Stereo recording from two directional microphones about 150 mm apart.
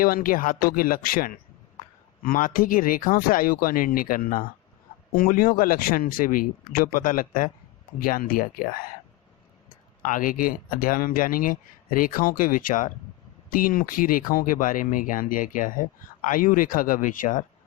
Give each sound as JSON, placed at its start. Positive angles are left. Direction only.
{"t": 0.0, "sound": "speech", "side_deg": 70}
{"t": 9.6, "sound": "speech", "side_deg": 60}